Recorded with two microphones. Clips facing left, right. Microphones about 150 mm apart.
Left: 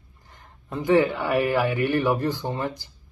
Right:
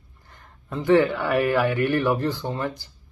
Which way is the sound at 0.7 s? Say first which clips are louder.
Right 1 dB; 5° left (ahead or behind).